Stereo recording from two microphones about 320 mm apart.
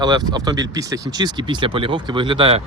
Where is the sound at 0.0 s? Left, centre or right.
Centre.